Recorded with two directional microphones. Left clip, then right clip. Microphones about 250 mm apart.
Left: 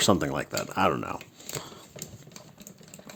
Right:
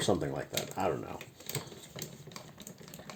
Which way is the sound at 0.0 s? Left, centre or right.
Left.